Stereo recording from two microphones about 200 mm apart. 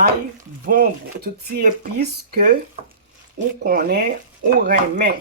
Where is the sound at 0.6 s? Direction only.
45° right (ahead or behind).